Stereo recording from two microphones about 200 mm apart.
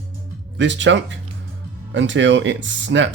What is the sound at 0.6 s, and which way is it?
Speech, 65° right (ahead or behind).